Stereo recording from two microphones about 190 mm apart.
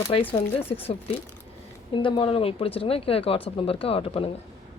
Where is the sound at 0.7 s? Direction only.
30° left (ahead or behind).